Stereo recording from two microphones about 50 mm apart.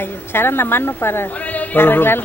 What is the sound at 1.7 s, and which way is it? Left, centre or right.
Speech, left.